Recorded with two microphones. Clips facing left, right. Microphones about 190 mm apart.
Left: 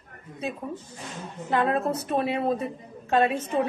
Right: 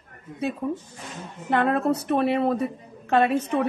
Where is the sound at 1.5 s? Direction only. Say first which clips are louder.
Right 2 dB; 65° right (ahead or behind).